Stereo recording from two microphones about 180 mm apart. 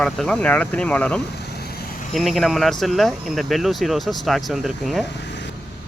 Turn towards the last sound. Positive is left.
turn(degrees=0)  # may be behind; listen again after turning